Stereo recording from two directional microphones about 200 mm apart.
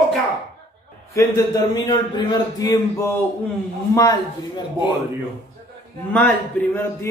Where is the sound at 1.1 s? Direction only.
15° left (ahead or behind).